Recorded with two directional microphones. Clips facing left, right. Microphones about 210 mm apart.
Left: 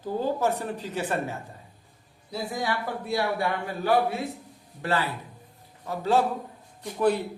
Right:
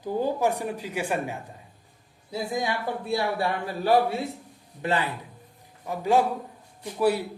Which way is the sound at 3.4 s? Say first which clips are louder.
Right 1 dB; 30° right (ahead or behind).